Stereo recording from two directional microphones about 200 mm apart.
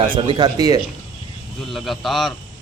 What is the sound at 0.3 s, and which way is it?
Speech, 20° right (ahead or behind).